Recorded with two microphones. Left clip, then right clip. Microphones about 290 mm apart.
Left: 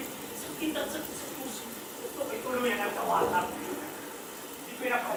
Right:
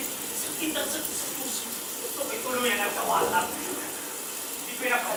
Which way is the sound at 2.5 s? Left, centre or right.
Centre.